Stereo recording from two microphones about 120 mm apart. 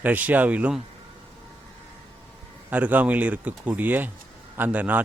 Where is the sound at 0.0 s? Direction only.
15° right (ahead or behind).